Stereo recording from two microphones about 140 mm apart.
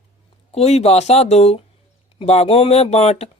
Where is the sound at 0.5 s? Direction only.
50° left (ahead or behind).